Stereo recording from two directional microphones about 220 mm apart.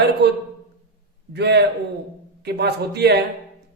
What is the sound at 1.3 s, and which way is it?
A man's voice, 50° right (ahead or behind).